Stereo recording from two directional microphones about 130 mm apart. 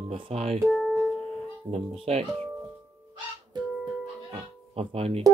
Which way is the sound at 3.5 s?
35° right (ahead or behind).